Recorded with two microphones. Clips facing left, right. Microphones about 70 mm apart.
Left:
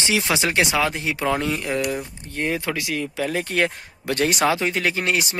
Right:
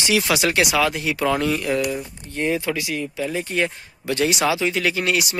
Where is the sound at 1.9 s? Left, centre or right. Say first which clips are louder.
Even; left.